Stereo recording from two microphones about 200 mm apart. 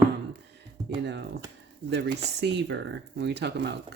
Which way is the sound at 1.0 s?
60° right (ahead or behind).